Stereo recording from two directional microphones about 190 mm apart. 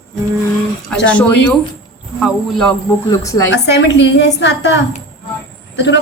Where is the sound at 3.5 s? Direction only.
65° left (ahead or behind).